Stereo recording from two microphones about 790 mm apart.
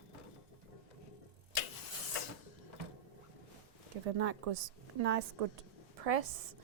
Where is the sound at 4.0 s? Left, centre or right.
Right.